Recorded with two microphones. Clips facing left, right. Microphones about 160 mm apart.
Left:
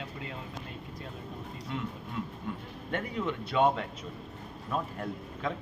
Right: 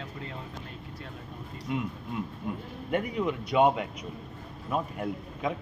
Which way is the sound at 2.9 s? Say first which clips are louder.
Right 4 dB; 15° right (ahead or behind).